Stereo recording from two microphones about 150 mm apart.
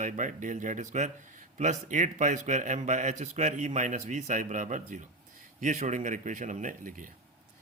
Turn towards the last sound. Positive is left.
turn(degrees=-60)  # may be behind; listen again after turning